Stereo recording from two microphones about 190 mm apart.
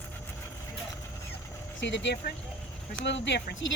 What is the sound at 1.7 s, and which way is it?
Speech, 70° left (ahead or behind).